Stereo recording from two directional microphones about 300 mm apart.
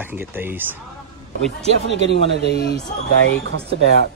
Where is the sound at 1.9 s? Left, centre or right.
Left.